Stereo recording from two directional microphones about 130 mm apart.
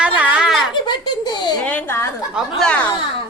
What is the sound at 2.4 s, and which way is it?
Speech, 5° left (ahead or behind).